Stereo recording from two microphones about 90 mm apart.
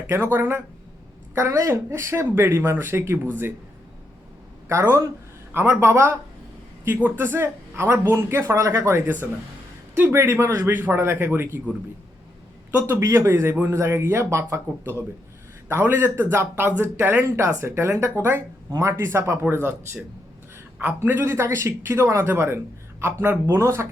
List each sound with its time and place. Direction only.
0.1 s speech: 25° right (ahead or behind)
4.7 s speech: 30° right (ahead or behind)
10.0 s speech: 30° right (ahead or behind)
12.9 s speech: 35° right (ahead or behind)
20.7 s a man's voice: 15° right (ahead or behind)
21.2 s speech: 30° right (ahead or behind)